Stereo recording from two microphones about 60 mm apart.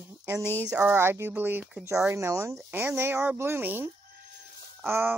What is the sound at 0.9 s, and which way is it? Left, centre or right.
Speech, right.